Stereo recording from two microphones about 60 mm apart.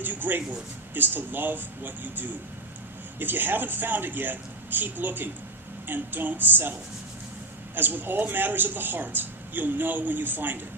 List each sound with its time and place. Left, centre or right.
0.0 s speech: right
7.8 s speech: right